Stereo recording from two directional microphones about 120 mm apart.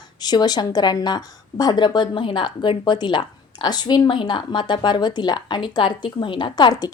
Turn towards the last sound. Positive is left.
turn(degrees=35)  # may be behind; listen again after turning